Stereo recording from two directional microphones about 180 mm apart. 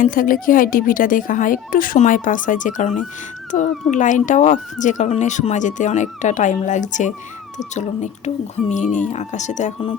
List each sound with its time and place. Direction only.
0.0 s speech: 50° left (ahead or behind)